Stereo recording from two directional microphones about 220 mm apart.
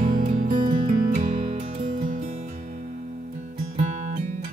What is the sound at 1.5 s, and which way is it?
Music, 25° right (ahead or behind).